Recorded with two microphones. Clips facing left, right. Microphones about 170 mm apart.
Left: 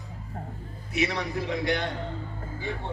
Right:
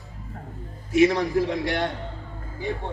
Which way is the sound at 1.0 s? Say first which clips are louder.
Right 9 dB; 45° right (ahead or behind).